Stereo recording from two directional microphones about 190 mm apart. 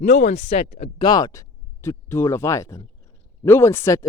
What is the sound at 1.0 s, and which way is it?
Speech, 20° left (ahead or behind).